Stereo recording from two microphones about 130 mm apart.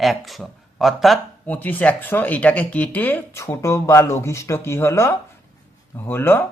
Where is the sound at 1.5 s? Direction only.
15° left (ahead or behind).